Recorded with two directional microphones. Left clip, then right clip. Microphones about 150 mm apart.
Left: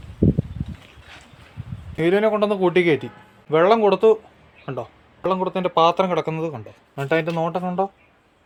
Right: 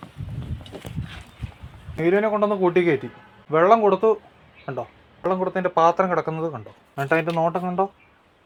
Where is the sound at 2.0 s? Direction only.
35° left (ahead or behind).